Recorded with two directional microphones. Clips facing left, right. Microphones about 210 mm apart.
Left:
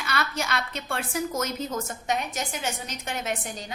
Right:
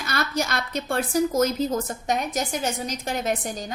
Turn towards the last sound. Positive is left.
turn(degrees=-35)  # may be behind; listen again after turning